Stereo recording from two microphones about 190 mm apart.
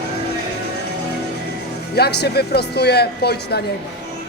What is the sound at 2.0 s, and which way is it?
Speech, 60° left (ahead or behind).